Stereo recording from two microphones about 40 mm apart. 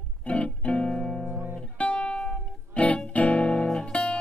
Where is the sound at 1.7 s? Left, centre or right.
Left.